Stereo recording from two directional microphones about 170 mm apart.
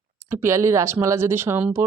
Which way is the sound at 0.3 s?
15° right (ahead or behind).